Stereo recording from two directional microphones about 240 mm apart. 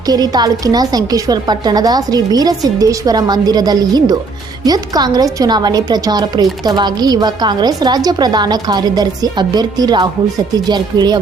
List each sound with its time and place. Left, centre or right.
0.1 s a woman's voice: centre